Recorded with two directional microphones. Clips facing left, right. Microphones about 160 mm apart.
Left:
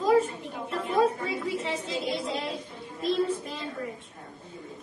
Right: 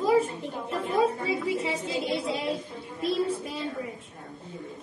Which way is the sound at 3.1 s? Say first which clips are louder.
Even; 10° right (ahead or behind).